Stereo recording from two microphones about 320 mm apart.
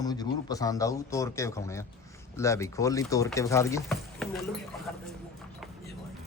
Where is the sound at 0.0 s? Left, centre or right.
Centre.